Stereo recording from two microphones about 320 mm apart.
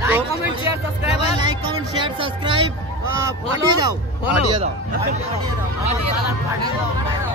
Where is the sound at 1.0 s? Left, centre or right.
Centre.